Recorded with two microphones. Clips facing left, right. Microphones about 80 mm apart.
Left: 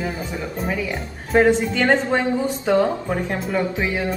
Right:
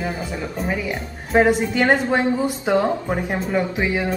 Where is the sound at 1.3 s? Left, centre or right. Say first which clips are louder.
Even; centre.